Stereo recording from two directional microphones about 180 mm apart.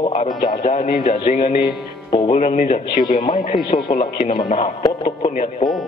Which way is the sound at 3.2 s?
25° left (ahead or behind).